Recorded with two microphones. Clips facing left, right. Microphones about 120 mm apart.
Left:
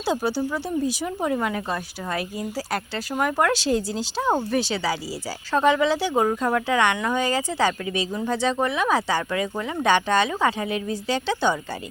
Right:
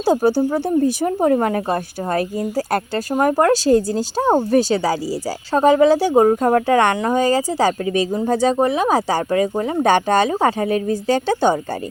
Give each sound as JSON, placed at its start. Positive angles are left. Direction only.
{"t": 0.0, "sound": "a woman's voice", "side_deg": -45}